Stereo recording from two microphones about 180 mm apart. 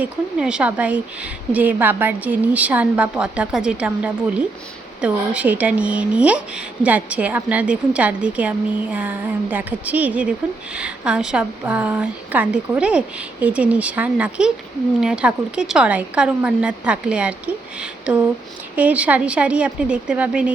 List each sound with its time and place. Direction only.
0.0 s speech: 5° right (ahead or behind)